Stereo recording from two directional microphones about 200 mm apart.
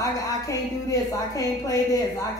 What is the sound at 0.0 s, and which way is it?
Speech, 15° left (ahead or behind).